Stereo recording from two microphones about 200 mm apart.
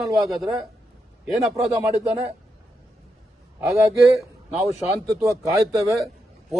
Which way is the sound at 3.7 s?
15° right (ahead or behind).